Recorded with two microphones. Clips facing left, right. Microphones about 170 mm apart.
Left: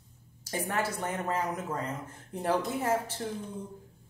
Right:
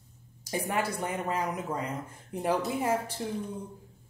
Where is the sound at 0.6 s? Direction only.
15° right (ahead or behind).